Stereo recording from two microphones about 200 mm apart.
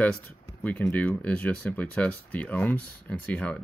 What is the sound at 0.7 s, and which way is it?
Speech, 5° left (ahead or behind).